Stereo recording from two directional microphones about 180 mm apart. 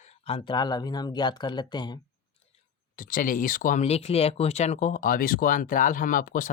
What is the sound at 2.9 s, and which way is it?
Speech, 50° left (ahead or behind).